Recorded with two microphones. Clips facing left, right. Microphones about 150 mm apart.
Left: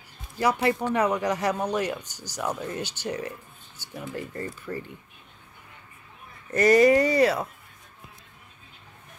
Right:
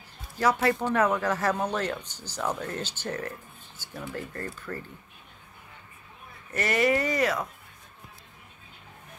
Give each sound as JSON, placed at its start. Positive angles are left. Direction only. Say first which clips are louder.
{"t": 0.4, "sound": "a man's voice", "louder": "left 1 dB", "side_deg": 15}
{"t": 6.5, "sound": "speech", "louder": "left 7 dB", "side_deg": 40}